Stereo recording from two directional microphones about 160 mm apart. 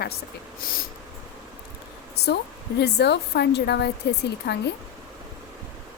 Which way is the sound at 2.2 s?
90° left.